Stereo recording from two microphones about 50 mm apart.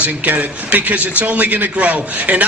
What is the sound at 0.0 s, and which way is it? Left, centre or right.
A man's voice, right.